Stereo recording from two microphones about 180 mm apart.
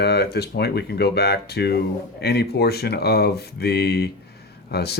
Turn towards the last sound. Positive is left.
turn(degrees=65)  # may be behind; listen again after turning